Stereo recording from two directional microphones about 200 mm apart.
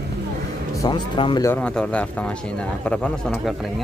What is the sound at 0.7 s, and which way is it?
Speech, 20° left (ahead or behind).